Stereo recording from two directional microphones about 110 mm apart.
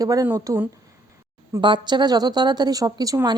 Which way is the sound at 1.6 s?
45° right (ahead or behind).